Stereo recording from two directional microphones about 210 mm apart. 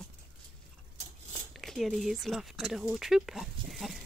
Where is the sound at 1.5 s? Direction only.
Centre (ahead or behind).